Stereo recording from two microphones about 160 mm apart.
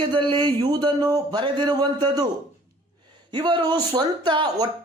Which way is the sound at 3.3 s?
30° right (ahead or behind).